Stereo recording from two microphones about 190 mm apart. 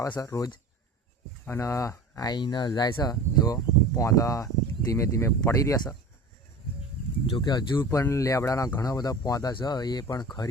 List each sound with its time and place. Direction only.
0.0 s speech: 15° left (ahead or behind)
7.3 s speech: 25° left (ahead or behind)